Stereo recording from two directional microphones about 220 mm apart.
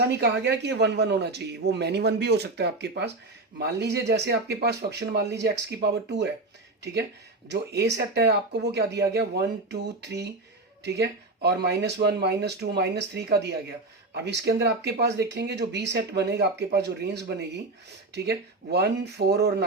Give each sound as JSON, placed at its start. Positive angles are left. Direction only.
{"t": 0.2, "sound": "speech", "side_deg": -50}
{"t": 7.4, "sound": "speech", "side_deg": -50}